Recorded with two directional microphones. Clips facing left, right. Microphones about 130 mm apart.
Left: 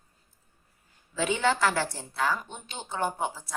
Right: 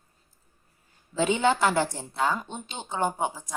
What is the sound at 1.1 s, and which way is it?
A woman's voice, 20° right (ahead or behind).